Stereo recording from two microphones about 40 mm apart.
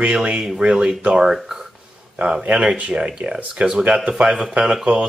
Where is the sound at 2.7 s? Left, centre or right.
Right.